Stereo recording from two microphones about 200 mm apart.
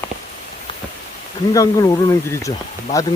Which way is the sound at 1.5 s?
15° left (ahead or behind).